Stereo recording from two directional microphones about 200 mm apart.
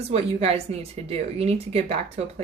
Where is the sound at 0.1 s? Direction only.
30° right (ahead or behind).